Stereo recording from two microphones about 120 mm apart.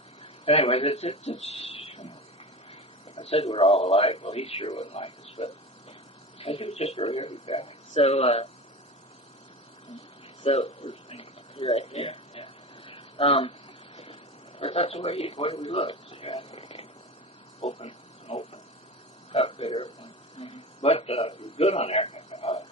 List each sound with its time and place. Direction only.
0.2 s speech: 55° left (ahead or behind)
3.2 s a man's voice: 60° left (ahead or behind)
10.4 s a sound: 55° left (ahead or behind)
13.9 s vehicle: 55° left (ahead or behind)
14.6 s a man's voice: 50° left (ahead or behind)
17.6 s speech: 70° left (ahead or behind)
17.8 s a sound: 50° left (ahead or behind)
19.3 s speech: 50° left (ahead or behind)